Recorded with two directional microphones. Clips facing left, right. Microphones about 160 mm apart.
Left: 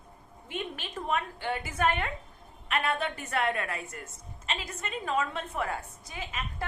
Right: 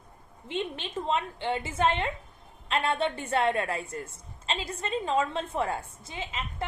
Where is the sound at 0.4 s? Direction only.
25° right (ahead or behind).